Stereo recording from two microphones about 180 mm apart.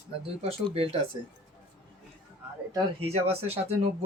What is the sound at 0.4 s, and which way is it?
Speech, 35° right (ahead or behind).